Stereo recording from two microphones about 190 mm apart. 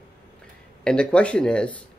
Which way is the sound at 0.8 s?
5° left (ahead or behind).